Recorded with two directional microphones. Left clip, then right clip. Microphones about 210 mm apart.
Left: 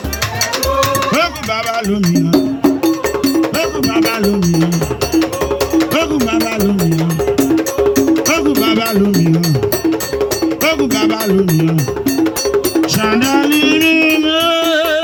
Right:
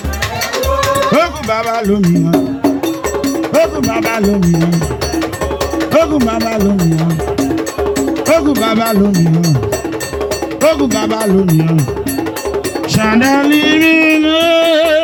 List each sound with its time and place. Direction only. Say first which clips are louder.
10.6 s speech: right 5 dB; 25° right (ahead or behind)
13.3 s music: right 2 dB; 30° right (ahead or behind)